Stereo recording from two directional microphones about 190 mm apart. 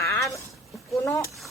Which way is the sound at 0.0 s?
15° left (ahead or behind).